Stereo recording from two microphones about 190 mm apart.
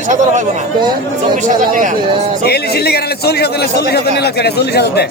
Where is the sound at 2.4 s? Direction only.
55° left (ahead or behind).